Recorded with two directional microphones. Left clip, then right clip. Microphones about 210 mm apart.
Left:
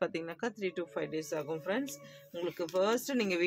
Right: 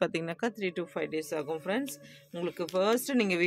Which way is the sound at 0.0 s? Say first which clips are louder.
Right 4 dB; 55° right (ahead or behind).